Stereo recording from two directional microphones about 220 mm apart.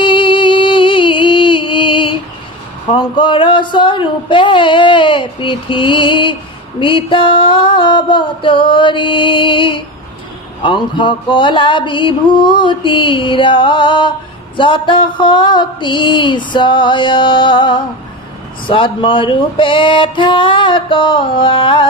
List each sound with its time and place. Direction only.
0.0 s music: 20° left (ahead or behind)
2.9 s mantra: 20° left (ahead or behind)